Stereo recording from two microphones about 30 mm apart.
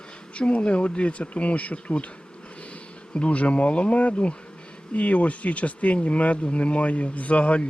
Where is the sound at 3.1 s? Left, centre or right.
Left.